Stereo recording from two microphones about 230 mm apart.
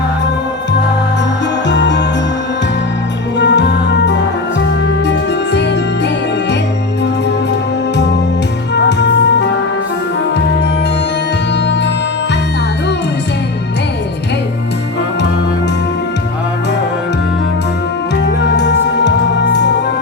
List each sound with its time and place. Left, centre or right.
1.6 s music: left
3.3 s music: left
8.7 s music: left
18.5 s music: left